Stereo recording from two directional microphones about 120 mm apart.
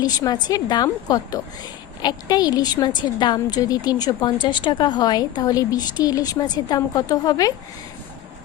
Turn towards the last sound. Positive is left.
turn(degrees=30)  # may be behind; listen again after turning